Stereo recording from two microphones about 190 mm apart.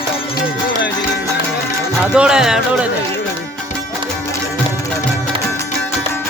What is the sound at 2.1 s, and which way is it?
Music, 5° right (ahead or behind).